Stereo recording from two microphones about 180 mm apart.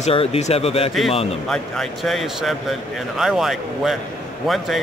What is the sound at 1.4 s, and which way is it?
Speech, centre (ahead or behind).